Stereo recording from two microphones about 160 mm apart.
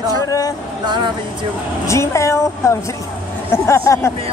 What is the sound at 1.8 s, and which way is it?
Speech, 20° left (ahead or behind).